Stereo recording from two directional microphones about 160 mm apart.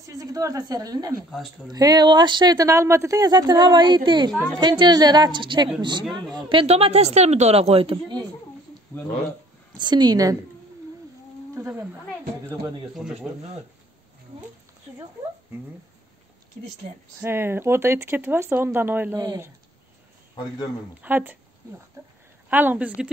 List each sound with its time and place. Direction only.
0.0 s speech: 20° right (ahead or behind)
9.8 s speech: 25° right (ahead or behind)
11.5 s speech: 15° right (ahead or behind)
12.9 s speech: 5° right (ahead or behind)
17.2 s speech: 15° right (ahead or behind)
21.0 s speech: 10° right (ahead or behind)
22.0 s a sound: 20° right (ahead or behind)
22.5 s speech: 10° right (ahead or behind)